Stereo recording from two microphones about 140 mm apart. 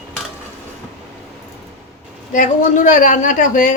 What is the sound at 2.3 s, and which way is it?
A woman's voice, 65° left (ahead or behind).